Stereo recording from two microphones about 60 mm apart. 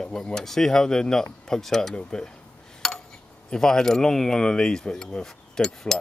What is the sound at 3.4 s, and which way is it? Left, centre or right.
Speech, centre.